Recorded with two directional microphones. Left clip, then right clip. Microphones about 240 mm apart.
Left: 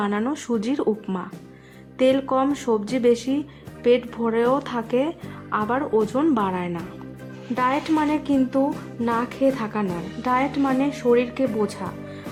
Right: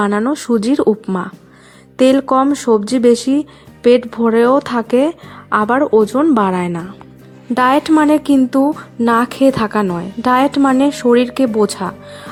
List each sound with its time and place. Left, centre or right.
0.0 s speech: right